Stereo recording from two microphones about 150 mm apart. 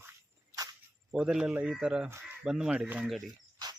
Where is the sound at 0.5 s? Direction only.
25° right (ahead or behind).